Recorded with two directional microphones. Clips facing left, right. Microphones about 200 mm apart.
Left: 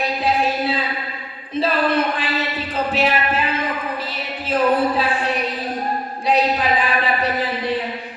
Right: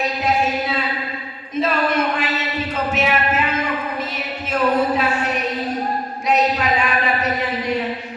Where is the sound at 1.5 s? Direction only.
30° left (ahead or behind).